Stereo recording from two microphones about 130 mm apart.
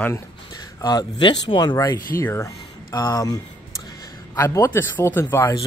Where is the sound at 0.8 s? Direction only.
30° left (ahead or behind).